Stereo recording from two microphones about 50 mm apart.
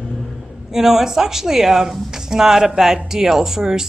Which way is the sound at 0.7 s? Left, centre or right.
Centre.